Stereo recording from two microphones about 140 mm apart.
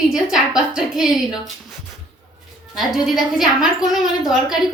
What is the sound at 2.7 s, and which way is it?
A woman's voice, centre (ahead or behind).